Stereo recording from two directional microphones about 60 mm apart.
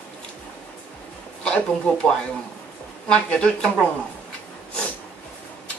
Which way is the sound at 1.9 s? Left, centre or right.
Centre.